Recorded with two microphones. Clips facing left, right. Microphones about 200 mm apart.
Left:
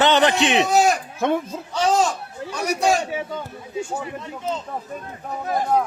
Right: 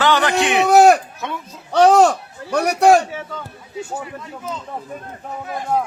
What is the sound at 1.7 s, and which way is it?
Speech, 65° right (ahead or behind).